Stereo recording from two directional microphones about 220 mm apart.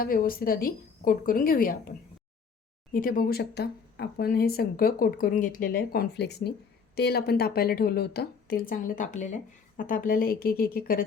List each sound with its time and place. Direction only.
0.0 s speech: 40° left (ahead or behind)